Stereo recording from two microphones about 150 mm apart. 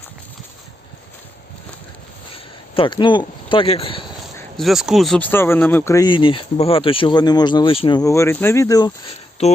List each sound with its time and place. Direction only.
2.3 s speech: 35° left (ahead or behind)
4.5 s speech: centre (ahead or behind)
5.3 s speech: 15° left (ahead or behind)
6.1 s speech: 35° left (ahead or behind)
8.0 s speech: 20° left (ahead or behind)